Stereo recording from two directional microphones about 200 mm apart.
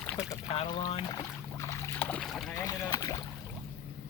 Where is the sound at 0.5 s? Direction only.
25° left (ahead or behind).